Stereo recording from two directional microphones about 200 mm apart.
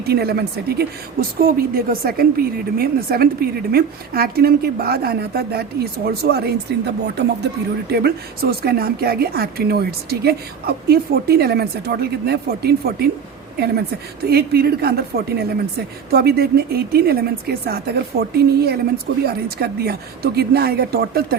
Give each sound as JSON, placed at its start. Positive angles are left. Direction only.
{"t": 0.0, "sound": "a woman's voice", "side_deg": -55}
{"t": 14.3, "sound": "a woman's voice", "side_deg": -50}